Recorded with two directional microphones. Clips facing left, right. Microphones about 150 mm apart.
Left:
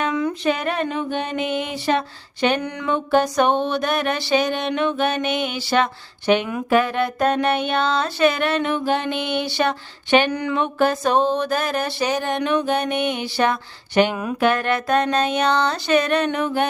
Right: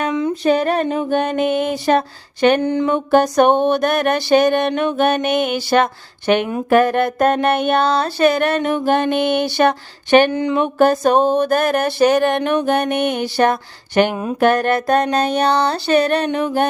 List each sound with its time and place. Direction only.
0.1 s a sound: 20° right (ahead or behind)
0.4 s music: 35° right (ahead or behind)
2.6 s mantra: 30° right (ahead or behind)
2.9 s music: 45° right (ahead or behind)
10.3 s mantra: 20° right (ahead or behind)
10.6 s music: 45° right (ahead or behind)